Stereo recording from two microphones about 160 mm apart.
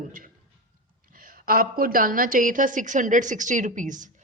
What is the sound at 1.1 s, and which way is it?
A woman's voice, 60° right (ahead or behind).